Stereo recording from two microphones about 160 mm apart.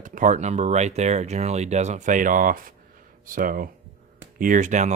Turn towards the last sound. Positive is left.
turn(degrees=-50)  # may be behind; listen again after turning